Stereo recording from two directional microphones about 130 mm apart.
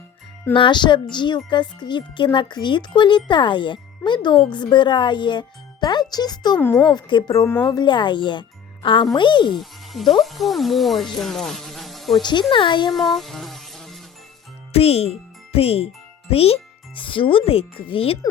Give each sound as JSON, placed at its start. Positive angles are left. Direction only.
{"t": 0.5, "sound": "speech", "side_deg": 40}
{"t": 9.6, "sound": "speech", "side_deg": 0}
{"t": 12.2, "sound": "speech", "side_deg": 35}
{"t": 12.9, "sound": "music", "side_deg": 0}
{"t": 14.7, "sound": "a child's voice", "side_deg": 50}